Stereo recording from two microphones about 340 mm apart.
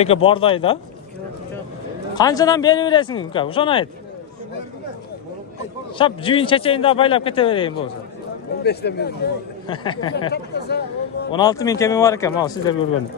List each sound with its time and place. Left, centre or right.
0.0 s a man's voice: centre
2.1 s a man's voice: centre
5.9 s a man's voice: centre
8.6 s speech: left
9.7 s a man's voice: centre
10.3 s speech: left
11.3 s a man's voice: centre